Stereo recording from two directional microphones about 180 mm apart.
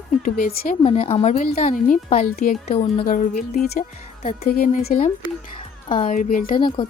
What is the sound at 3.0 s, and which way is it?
Speech, 50° left (ahead or behind).